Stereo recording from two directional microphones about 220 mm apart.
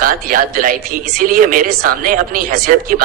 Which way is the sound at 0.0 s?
40° right (ahead or behind).